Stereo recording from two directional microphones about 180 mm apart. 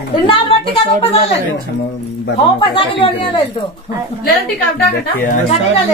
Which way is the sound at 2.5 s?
30° left (ahead or behind).